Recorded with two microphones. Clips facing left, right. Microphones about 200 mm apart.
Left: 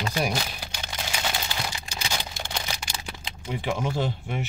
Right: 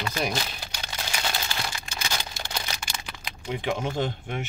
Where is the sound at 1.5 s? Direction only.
20° left (ahead or behind).